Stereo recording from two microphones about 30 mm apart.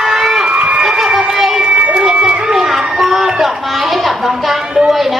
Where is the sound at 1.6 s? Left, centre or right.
Right.